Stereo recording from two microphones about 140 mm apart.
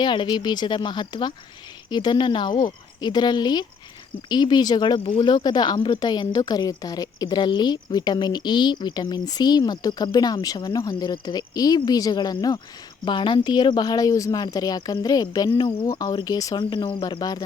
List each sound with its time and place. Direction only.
0.0 s speech: 35° left (ahead or behind)
15.9 s speech: 25° left (ahead or behind)